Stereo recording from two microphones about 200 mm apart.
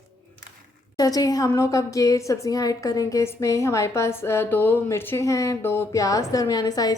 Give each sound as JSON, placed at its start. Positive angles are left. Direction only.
{"t": 0.9, "sound": "a woman's voice", "side_deg": 20}